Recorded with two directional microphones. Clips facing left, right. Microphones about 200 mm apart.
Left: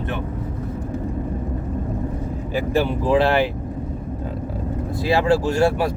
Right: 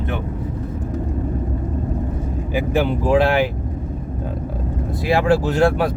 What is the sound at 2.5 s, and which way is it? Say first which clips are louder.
Speech: right 1 dB; 15° right (ahead or behind).